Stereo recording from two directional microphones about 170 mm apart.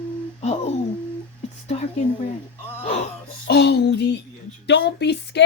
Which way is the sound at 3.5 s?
75° left (ahead or behind).